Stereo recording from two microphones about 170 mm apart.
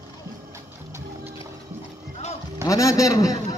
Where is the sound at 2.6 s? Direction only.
20° left (ahead or behind).